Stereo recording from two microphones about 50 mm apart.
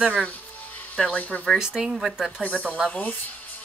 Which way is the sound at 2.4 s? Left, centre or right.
Left.